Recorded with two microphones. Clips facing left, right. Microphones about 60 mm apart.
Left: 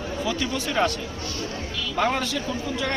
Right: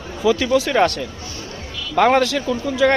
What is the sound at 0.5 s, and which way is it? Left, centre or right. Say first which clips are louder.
Speech: right 8 dB; right.